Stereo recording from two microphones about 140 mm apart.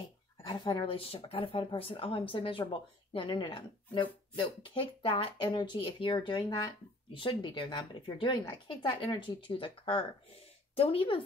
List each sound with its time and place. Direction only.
0.4 s speech: 35° left (ahead or behind)